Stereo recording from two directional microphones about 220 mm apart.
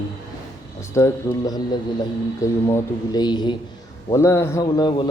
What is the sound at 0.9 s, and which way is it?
A man's voice, 15° left (ahead or behind).